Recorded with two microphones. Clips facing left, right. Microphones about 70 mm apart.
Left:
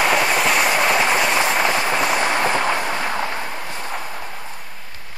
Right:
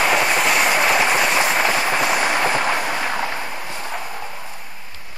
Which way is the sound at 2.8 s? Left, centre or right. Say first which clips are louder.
Even; left.